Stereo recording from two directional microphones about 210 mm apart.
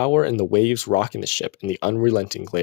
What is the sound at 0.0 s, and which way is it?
Speech, 35° left (ahead or behind).